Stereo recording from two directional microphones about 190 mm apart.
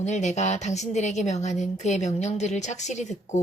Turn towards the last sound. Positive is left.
turn(degrees=40)  # may be behind; listen again after turning